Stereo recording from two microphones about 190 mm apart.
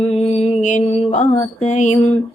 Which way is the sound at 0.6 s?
40° left (ahead or behind).